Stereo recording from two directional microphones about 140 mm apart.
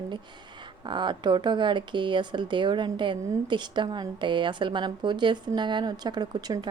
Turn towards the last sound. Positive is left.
turn(degrees=-30)  # may be behind; listen again after turning